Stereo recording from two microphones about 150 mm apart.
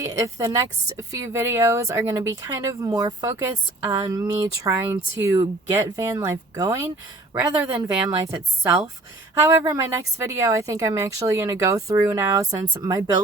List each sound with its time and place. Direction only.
0.0 s a woman's voice: 20° right (ahead or behind)